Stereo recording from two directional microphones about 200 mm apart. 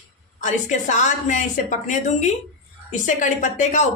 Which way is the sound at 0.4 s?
40° left (ahead or behind).